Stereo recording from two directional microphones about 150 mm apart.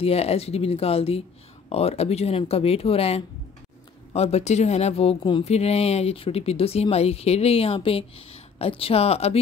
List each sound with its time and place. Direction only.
0.0 s speech: 40° left (ahead or behind)